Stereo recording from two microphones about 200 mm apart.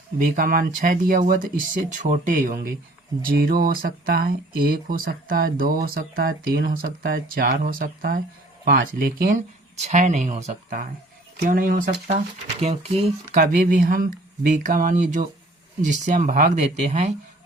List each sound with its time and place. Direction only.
0.2 s speech: 45° right (ahead or behind)
9.7 s speech: 35° right (ahead or behind)
12.0 s speech: 30° right (ahead or behind)